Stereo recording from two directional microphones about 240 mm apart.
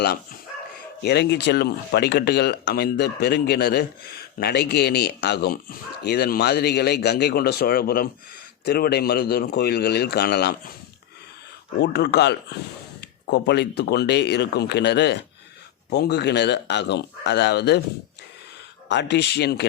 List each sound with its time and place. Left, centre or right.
0.0 s a man's voice: left
11.8 s speech: left
18.9 s speech: left